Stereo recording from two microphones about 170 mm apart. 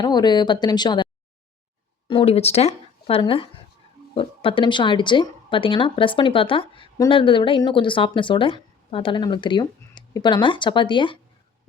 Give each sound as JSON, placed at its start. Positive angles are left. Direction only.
{"t": 0.0, "sound": "speech", "side_deg": 25}
{"t": 2.0, "sound": "a woman's voice", "side_deg": 35}